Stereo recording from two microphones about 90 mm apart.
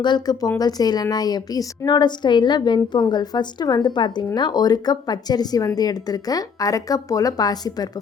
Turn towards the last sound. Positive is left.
turn(degrees=45)  # may be behind; listen again after turning